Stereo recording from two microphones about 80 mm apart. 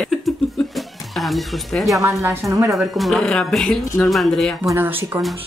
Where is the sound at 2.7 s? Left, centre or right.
Centre.